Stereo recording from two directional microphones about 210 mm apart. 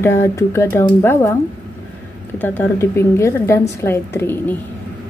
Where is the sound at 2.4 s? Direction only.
10° left (ahead or behind).